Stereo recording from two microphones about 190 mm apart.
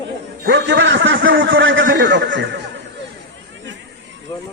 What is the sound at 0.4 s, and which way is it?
A man's voice, 70° right (ahead or behind).